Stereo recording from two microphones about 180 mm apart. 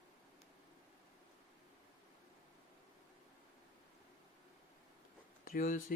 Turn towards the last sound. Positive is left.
turn(degrees=50)  # may be behind; listen again after turning